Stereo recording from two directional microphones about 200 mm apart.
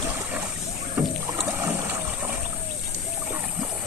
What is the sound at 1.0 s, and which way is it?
Rowboat, 10° right (ahead or behind).